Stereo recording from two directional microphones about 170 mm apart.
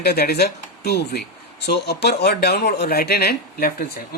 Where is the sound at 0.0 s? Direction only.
70° left (ahead or behind).